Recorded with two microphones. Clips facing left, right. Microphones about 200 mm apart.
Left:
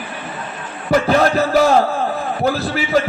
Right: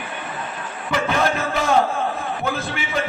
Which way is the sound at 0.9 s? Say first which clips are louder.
Left 7 dB; 35° left (ahead or behind).